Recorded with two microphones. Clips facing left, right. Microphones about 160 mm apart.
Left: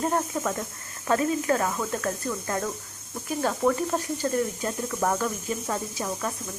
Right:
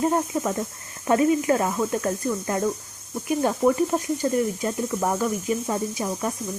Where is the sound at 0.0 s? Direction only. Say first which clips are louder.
Right 3 dB; 15° right (ahead or behind).